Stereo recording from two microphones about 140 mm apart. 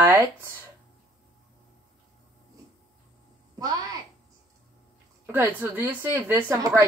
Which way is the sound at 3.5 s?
25° right (ahead or behind).